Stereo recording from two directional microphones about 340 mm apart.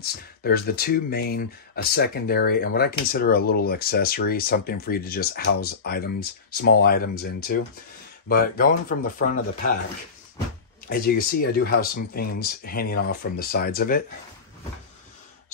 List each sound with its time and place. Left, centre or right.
0.0 s speech: left
10.9 s speech: left